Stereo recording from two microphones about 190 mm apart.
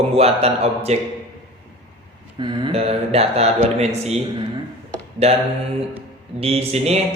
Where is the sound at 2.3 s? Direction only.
25° right (ahead or behind).